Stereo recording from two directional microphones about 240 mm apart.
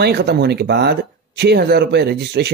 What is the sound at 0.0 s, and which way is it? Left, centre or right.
Speech, right.